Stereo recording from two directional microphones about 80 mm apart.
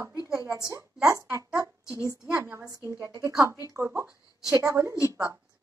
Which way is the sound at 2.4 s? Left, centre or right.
Right.